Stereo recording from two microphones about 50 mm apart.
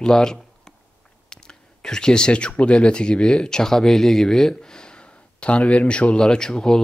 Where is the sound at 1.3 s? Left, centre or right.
Centre.